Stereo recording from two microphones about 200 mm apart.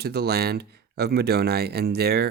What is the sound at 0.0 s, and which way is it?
Speech, 50° right (ahead or behind).